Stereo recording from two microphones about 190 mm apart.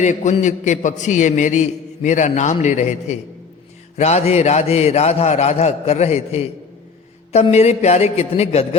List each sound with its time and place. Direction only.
0.0 s a man's voice: 40° left (ahead or behind)